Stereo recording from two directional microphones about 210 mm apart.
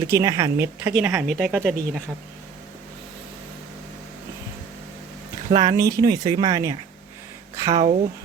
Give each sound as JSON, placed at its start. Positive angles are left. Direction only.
{"t": 0.1, "sound": "speech", "side_deg": -15}
{"t": 5.5, "sound": "speech", "side_deg": -20}